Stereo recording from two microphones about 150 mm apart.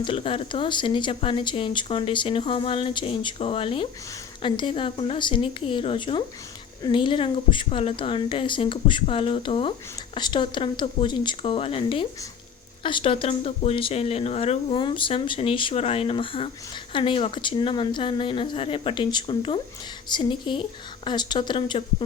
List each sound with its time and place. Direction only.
0.0 s speech: 35° left (ahead or behind)